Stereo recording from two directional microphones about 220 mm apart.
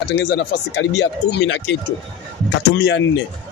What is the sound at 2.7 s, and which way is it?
Speech, 50° left (ahead or behind).